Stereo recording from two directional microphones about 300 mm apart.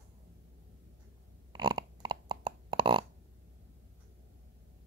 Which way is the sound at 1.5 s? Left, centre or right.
Centre.